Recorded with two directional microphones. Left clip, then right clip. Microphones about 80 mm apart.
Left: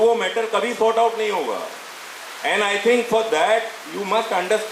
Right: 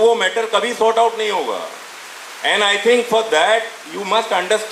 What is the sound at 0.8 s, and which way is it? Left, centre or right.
Speech, left.